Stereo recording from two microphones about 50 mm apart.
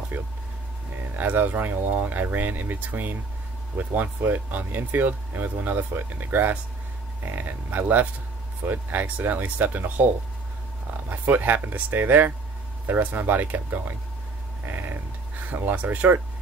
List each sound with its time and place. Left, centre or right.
1.1 s speech: right
11.1 s speech: right
15.5 s speech: right